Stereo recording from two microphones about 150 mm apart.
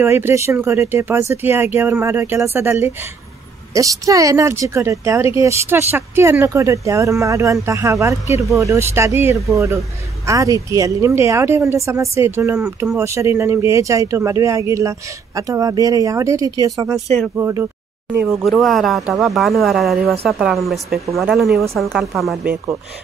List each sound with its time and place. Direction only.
0.0 s speech: 20° right (ahead or behind)
18.2 s speech: centre (ahead or behind)